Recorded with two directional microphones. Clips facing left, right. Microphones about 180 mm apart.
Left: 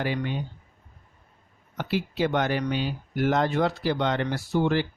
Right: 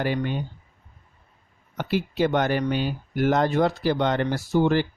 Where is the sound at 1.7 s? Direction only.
50° right (ahead or behind).